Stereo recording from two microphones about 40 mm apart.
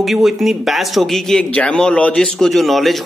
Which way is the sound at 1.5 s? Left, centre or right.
Left.